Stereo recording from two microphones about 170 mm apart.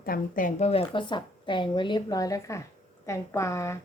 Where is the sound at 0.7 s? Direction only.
30° left (ahead or behind); by 3.7 s 15° left (ahead or behind).